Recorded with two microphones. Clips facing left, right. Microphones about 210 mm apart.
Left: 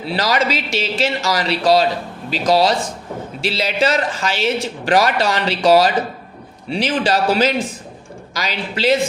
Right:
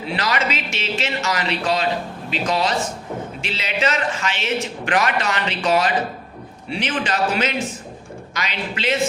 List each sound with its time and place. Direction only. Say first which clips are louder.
0.0 s a man's voice: left 4 dB; 35° left (ahead or behind)